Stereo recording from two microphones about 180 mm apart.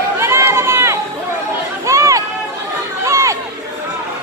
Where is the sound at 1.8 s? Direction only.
15° right (ahead or behind).